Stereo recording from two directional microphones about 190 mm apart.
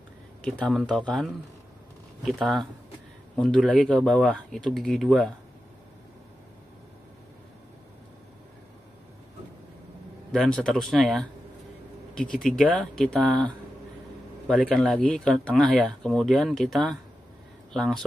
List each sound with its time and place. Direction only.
0.4 s speech: 5° left (ahead or behind)
10.3 s speech: 5° left (ahead or behind)